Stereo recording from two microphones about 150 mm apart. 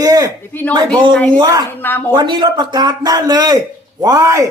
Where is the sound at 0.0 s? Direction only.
25° right (ahead or behind).